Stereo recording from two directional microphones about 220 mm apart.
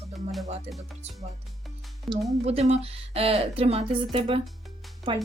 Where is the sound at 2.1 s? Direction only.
Centre (ahead or behind).